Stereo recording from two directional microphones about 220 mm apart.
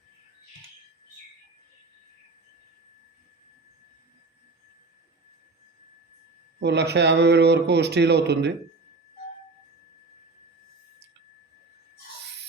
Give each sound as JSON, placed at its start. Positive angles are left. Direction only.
{"t": 6.6, "sound": "a man's voice", "side_deg": -50}